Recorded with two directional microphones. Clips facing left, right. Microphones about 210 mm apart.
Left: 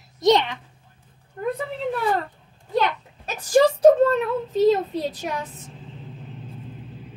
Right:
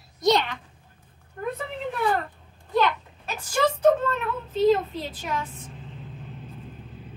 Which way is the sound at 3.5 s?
35° left (ahead or behind).